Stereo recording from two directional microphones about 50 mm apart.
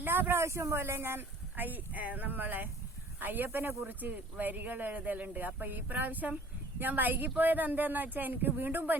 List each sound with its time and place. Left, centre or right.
0.0 s a sound: right
0.3 s speech: right
1.6 s speech: right